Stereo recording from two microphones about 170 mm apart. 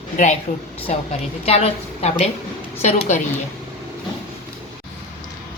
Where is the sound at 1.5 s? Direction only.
35° left (ahead or behind).